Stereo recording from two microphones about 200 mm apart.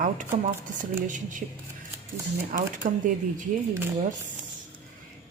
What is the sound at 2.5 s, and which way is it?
Speech, 45° right (ahead or behind).